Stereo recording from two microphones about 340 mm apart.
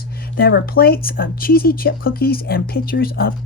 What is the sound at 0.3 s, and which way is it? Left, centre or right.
Speech, left.